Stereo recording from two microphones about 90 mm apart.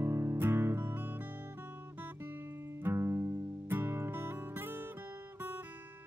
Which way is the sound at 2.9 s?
30° right (ahead or behind).